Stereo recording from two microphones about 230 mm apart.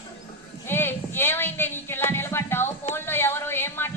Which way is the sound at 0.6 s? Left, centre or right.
Centre.